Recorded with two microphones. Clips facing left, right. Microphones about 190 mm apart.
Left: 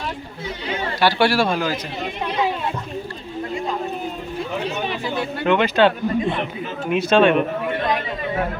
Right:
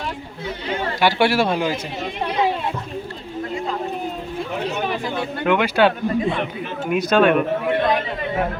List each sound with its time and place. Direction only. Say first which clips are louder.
0.9 s speech: even; 20° right (ahead or behind)
5.5 s speech: left 1 dB; 10° right (ahead or behind)